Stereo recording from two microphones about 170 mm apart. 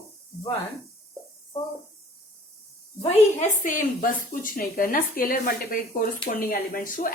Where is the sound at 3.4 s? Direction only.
50° left (ahead or behind).